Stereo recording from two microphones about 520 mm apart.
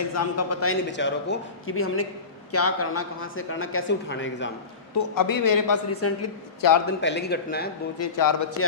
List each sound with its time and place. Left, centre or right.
0.1 s speech: left
4.9 s a man's voice: left
5.9 s speech: left
6.6 s a man's voice: left
6.8 s speech: centre
8.0 s a man's voice: left